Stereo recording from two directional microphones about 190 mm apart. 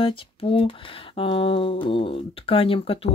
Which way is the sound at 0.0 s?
30° left (ahead or behind).